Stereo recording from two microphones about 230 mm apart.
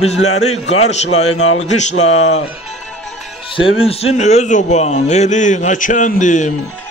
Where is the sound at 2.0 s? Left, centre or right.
Left.